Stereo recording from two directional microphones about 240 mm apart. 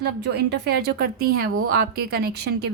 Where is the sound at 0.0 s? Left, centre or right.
Right.